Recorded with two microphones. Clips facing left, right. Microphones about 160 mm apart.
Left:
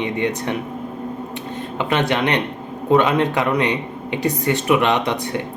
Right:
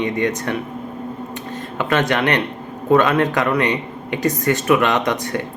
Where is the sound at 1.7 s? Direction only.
15° left (ahead or behind).